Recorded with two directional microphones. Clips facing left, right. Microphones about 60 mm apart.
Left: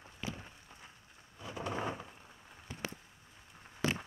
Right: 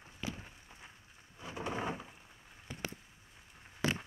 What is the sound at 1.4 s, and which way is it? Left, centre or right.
Thunder, centre.